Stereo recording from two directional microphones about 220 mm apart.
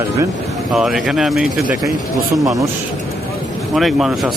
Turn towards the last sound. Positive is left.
turn(degrees=0)  # may be behind; listen again after turning